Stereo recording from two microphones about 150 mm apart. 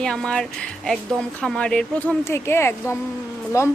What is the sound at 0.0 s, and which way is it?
Speech, 5° left (ahead or behind).